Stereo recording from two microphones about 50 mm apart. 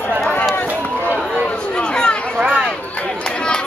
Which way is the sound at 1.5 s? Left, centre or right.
Centre.